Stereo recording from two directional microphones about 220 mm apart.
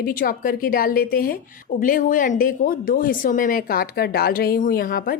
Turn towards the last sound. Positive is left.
turn(degrees=40)  # may be behind; listen again after turning